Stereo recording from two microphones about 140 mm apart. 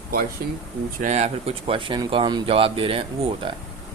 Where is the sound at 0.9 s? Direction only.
60° right (ahead or behind); by 3.6 s 40° right (ahead or behind).